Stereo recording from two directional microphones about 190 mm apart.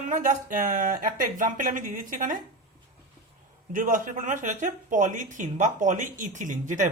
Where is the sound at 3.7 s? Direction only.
45° right (ahead or behind).